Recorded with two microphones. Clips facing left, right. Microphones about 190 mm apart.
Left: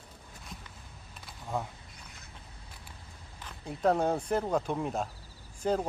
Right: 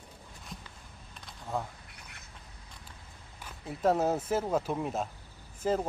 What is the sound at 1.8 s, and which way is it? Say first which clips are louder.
Duck: even; 70° right (ahead or behind).